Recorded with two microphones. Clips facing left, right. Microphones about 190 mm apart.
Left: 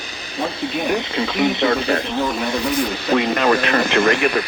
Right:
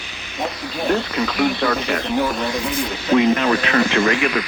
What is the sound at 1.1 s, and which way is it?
Speech, 25° left (ahead or behind).